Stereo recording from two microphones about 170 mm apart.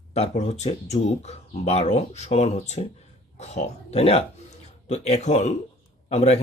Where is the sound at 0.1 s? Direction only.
40° left (ahead or behind).